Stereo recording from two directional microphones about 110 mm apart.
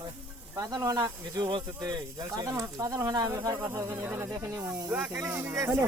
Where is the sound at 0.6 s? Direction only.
35° right (ahead or behind).